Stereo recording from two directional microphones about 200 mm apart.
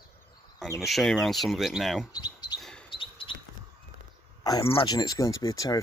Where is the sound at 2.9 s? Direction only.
25° left (ahead or behind).